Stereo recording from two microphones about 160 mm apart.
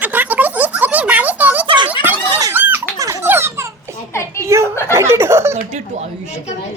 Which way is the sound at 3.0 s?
20° right (ahead or behind).